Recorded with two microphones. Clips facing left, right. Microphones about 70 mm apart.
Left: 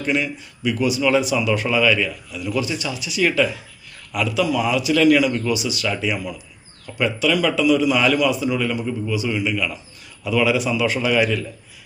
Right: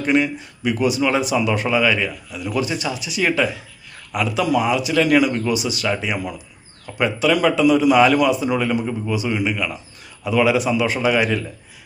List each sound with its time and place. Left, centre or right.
0.1 s a man's voice: right
2.5 s a man's voice: right
9.5 s a man's voice: right